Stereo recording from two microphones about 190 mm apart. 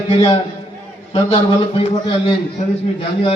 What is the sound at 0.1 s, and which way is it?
A man's voice, 30° left (ahead or behind).